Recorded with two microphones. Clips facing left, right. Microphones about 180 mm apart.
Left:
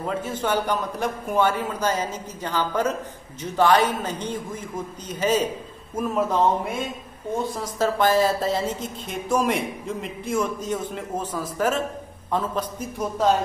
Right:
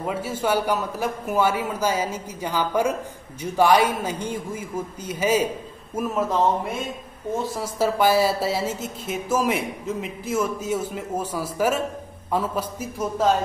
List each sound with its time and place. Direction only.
0.0 s speech: 10° right (ahead or behind)
7.5 s speech: 10° right (ahead or behind)